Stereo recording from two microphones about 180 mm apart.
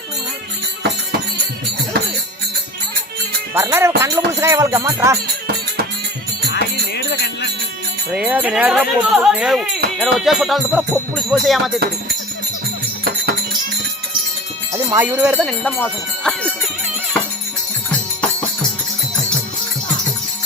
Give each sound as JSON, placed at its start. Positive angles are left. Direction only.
{"t": 3.5, "sound": "music", "side_deg": -10}
{"t": 6.5, "sound": "music", "side_deg": 65}
{"t": 8.1, "sound": "speech", "side_deg": -5}
{"t": 14.9, "sound": "music", "side_deg": -10}
{"t": 15.4, "sound": "speech", "side_deg": 5}